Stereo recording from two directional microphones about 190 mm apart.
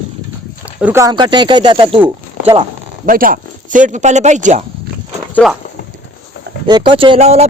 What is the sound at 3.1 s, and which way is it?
Speech, 45° right (ahead or behind).